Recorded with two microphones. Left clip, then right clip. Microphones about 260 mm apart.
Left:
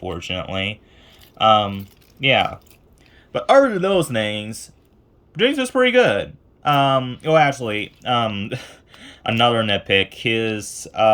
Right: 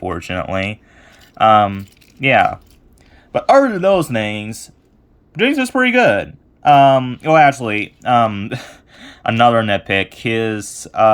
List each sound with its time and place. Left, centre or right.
0.1 s speech: centre
0.3 s speech: right
1.5 s speech: centre